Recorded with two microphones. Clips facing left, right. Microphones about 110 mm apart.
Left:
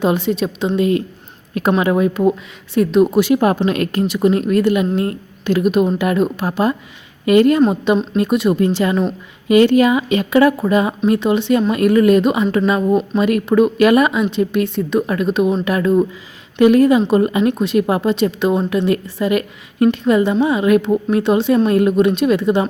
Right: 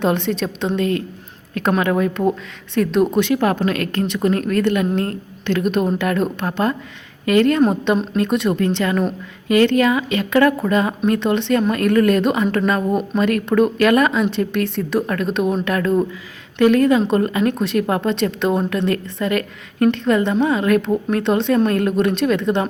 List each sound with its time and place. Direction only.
0.0 s a woman's voice: 5° left (ahead or behind); by 4.0 s 20° left (ahead or behind)
4.0 s a woman's voice: 10° left (ahead or behind)
8.6 s a woman's voice: 15° left (ahead or behind)